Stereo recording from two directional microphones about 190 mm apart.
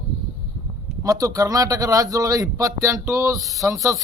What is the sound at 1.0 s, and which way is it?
A man's voice, 15° right (ahead or behind).